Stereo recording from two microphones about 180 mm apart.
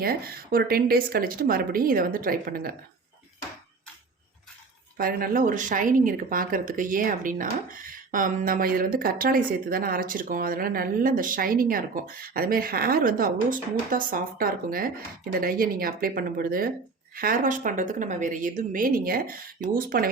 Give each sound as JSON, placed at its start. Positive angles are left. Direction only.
{"t": 0.0, "sound": "a woman's voice", "side_deg": -55}
{"t": 4.9, "sound": "speech", "side_deg": -55}